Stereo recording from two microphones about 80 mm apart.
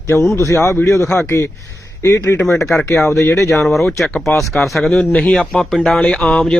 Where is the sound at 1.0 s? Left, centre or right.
Centre.